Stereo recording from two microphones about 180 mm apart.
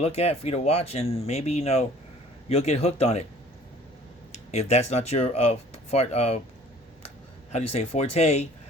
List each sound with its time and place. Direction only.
0.0 s speech: 35° left (ahead or behind)
4.5 s speech: 35° left (ahead or behind)
7.5 s speech: 35° left (ahead or behind)